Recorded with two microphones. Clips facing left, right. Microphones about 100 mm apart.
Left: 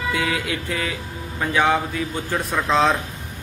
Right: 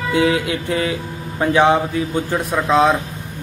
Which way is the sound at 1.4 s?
25° right (ahead or behind).